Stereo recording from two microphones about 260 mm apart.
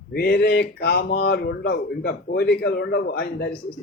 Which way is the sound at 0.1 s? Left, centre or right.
Left.